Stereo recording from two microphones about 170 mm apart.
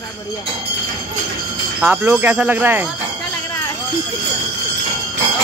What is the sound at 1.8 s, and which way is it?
Speech, 10° right (ahead or behind).